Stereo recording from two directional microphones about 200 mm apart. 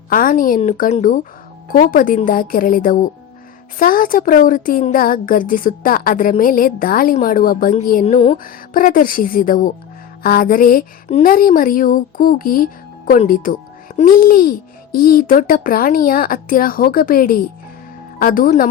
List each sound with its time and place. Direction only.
0.1 s speech: 45° left (ahead or behind)